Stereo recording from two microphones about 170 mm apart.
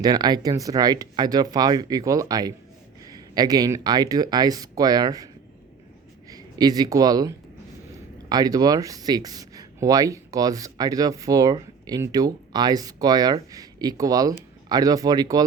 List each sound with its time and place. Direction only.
0.0 s speech: 25° right (ahead or behind)
6.3 s speech: 25° right (ahead or behind)